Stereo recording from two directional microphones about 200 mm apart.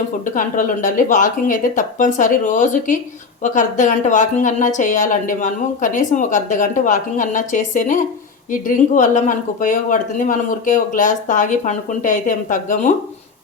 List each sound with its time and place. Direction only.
0.3 s a woman's voice: 40° left (ahead or behind)